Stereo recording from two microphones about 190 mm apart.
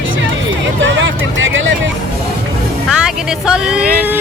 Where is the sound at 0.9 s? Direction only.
80° right.